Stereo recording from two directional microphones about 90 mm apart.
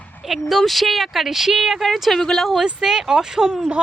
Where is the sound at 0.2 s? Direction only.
Centre (ahead or behind).